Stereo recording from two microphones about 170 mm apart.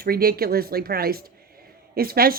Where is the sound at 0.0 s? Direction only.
60° right (ahead or behind).